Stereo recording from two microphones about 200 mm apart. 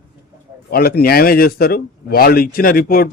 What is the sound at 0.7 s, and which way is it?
Speech, 50° left (ahead or behind).